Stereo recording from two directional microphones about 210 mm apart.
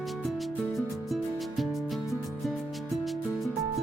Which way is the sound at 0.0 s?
Centre (ahead or behind).